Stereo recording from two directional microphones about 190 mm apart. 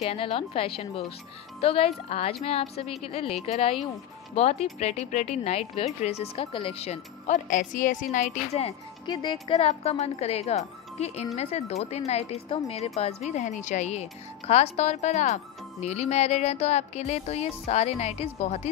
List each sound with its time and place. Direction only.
0.0 s a woman's voice: 30° left (ahead or behind)